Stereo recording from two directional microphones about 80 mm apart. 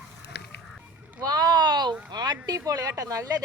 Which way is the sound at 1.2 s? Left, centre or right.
Right.